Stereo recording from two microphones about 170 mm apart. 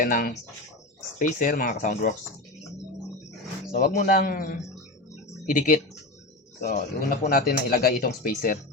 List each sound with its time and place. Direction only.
0.0 s speech: 55° left (ahead or behind)
1.4 s speech: 55° left (ahead or behind)
3.7 s a man's voice: 50° left (ahead or behind)
6.7 s speech: 45° left (ahead or behind)
7.3 s a man's voice: 55° left (ahead or behind)